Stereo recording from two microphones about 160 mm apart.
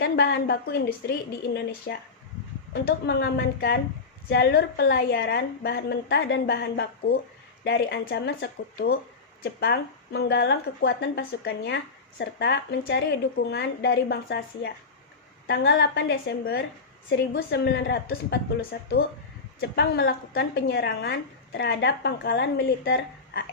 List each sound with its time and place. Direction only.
0.2 s a woman's voice: 90° left